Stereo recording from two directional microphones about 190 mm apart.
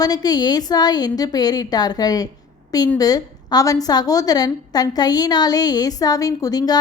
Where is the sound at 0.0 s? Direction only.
20° left (ahead or behind).